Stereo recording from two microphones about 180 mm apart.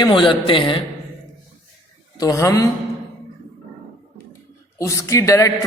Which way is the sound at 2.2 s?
20° left (ahead or behind).